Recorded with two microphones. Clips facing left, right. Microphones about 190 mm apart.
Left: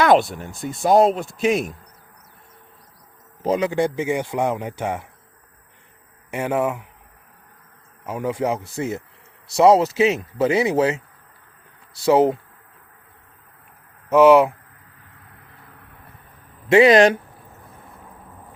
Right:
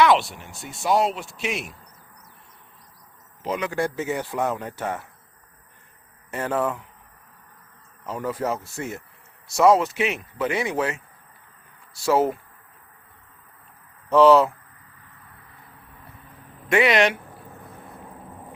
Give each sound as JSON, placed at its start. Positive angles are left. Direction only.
{"t": 0.0, "sound": "speech", "side_deg": 50}
{"t": 3.6, "sound": "speech", "side_deg": 20}
{"t": 6.3, "sound": "speech", "side_deg": 10}
{"t": 8.0, "sound": "speech", "side_deg": 10}
{"t": 9.7, "sound": "speech", "side_deg": 30}
{"t": 12.0, "sound": "speech", "side_deg": 20}
{"t": 14.1, "sound": "speech", "side_deg": 10}
{"t": 16.6, "sound": "speech", "side_deg": 25}
{"t": 16.9, "sound": "speech", "side_deg": 40}